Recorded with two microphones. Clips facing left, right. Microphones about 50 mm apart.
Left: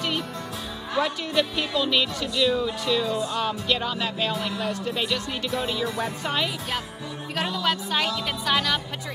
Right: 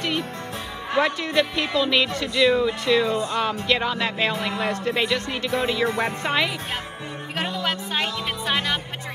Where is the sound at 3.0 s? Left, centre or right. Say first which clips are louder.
Right 4 dB; right.